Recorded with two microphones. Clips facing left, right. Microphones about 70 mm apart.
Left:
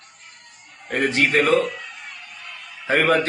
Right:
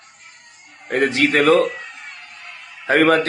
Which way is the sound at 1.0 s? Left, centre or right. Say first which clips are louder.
Right 2 dB; right.